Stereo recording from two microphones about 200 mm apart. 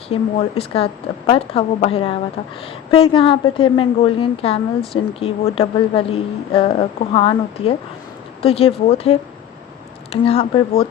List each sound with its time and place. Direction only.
0.1 s a woman's voice: 30° left (ahead or behind)